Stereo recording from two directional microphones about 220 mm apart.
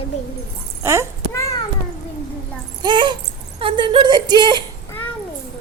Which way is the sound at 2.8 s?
20° right (ahead or behind).